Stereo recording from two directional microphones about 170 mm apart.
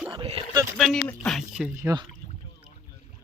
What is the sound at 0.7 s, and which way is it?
Speech, centre (ahead or behind).